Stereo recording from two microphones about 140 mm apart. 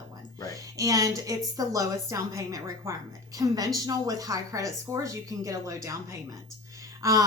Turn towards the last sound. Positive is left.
turn(degrees=-25)  # may be behind; listen again after turning